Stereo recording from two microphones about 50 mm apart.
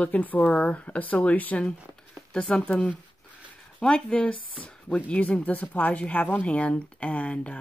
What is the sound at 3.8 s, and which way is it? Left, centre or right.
Speech, centre.